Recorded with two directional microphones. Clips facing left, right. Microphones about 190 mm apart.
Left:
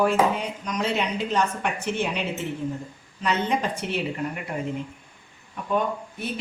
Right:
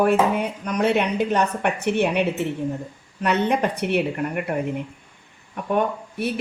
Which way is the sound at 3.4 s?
60° right (ahead or behind).